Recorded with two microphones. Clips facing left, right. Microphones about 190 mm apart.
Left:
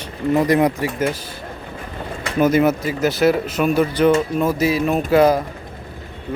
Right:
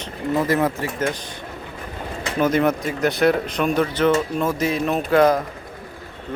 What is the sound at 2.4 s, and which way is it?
Speech, 10° left (ahead or behind).